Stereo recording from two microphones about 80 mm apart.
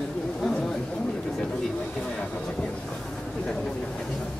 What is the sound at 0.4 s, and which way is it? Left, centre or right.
Chatter, centre.